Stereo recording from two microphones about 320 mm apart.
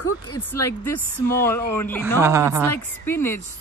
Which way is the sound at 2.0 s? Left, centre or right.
Centre.